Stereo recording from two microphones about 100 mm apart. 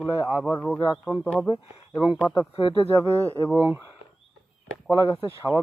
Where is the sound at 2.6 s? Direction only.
65° left (ahead or behind).